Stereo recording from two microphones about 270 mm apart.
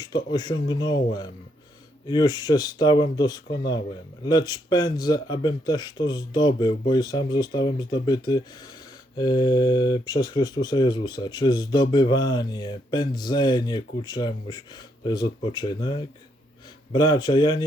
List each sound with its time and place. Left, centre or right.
0.0 s speech: centre
2.0 s speech: centre
3.4 s speech: left
4.2 s speech: centre